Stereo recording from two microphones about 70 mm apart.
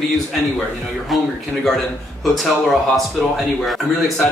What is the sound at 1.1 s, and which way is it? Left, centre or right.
Speech, centre.